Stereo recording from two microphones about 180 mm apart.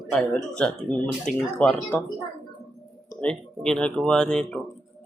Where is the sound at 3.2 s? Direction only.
5° left (ahead or behind).